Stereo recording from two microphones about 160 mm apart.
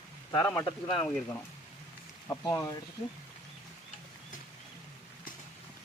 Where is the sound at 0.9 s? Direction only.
5° left (ahead or behind).